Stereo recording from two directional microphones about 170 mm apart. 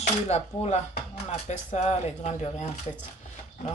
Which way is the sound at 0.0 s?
40° left (ahead or behind).